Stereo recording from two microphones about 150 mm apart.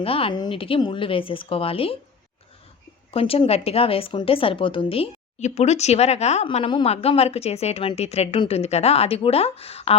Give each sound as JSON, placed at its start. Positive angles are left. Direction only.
{"t": 0.0, "sound": "a woman's voice", "side_deg": 40}
{"t": 3.1, "sound": "a woman's voice", "side_deg": 40}